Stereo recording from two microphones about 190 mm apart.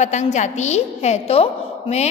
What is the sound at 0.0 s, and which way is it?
A woman's voice, 35° left (ahead or behind).